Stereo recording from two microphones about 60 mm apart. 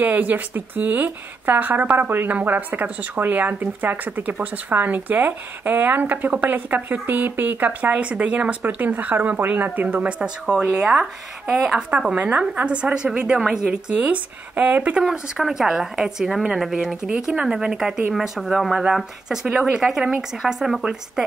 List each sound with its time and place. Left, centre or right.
0.0 s speech: right; by 11.8 s centre
12.2 s speech: right
15.0 s speech: centre
17.1 s speech: right
17.5 s speech: centre